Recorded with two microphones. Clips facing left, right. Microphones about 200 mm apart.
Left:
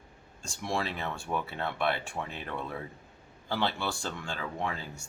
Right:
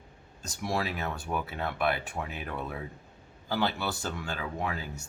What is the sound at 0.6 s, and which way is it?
Speech, 5° right (ahead or behind).